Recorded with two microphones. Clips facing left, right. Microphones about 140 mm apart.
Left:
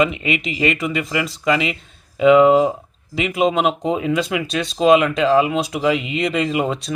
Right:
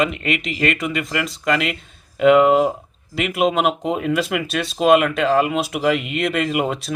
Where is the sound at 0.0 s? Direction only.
Centre (ahead or behind).